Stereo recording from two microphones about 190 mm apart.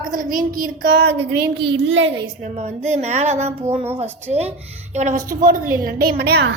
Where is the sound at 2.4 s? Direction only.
35° right (ahead or behind).